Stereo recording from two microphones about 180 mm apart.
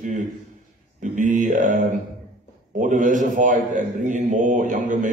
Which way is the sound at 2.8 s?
45° right (ahead or behind).